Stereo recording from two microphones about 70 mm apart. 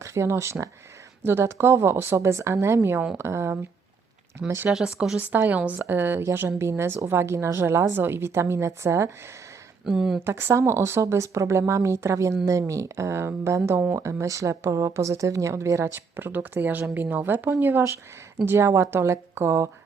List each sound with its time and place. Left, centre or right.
0.0 s a woman's voice: right
5.1 s a woman's voice: right
9.8 s a woman's voice: centre
10.2 s a woman's voice: right
18.4 s a woman's voice: right